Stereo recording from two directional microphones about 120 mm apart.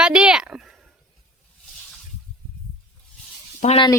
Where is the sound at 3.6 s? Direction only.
90° left.